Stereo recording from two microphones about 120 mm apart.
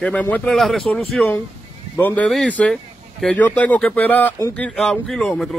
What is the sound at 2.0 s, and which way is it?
Speech, 15° left (ahead or behind).